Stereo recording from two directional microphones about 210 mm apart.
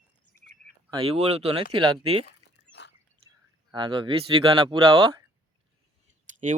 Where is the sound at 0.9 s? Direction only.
25° right (ahead or behind).